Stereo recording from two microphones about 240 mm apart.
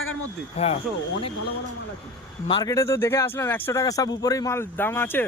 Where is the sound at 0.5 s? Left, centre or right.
Left.